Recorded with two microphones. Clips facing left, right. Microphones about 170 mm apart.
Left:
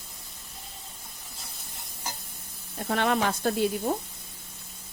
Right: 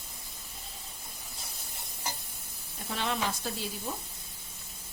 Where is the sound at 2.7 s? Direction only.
60° left (ahead or behind).